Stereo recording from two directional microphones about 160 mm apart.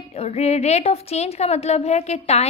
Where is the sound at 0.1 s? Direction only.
40° left (ahead or behind).